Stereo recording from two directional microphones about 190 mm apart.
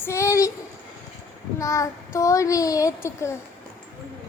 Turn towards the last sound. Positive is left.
turn(degrees=15)  # may be behind; listen again after turning